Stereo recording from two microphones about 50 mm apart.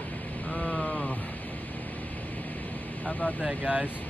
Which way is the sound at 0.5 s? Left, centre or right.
Left.